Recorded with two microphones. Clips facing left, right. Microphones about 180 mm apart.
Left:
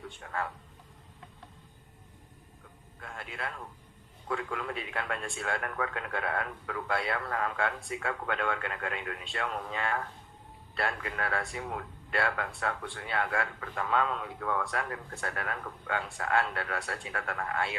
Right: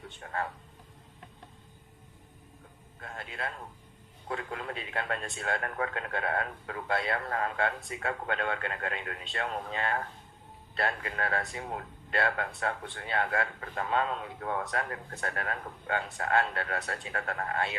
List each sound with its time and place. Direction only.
0.2 s speech: 35° right (ahead or behind)
3.2 s a man's voice: 30° right (ahead or behind)
5.3 s a man's voice: 25° right (ahead or behind)